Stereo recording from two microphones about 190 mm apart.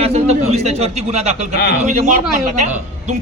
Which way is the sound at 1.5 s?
60° left (ahead or behind).